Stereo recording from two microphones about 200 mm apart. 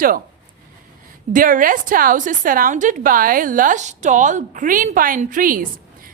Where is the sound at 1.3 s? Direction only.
45° right (ahead or behind).